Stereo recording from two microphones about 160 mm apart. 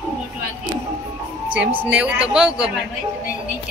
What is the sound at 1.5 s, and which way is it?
A woman's voice, 10° right (ahead or behind).